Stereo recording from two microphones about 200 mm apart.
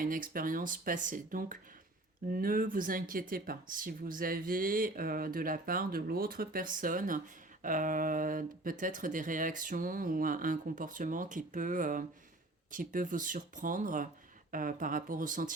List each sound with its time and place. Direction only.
0.0 s speech: 45° right (ahead or behind)